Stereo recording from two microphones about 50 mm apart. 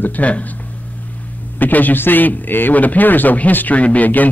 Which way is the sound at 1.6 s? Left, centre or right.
Left.